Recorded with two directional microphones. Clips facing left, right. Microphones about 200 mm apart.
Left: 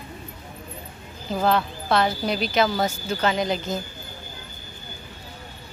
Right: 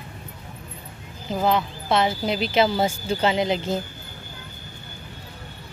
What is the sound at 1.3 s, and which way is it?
Speech, 15° right (ahead or behind).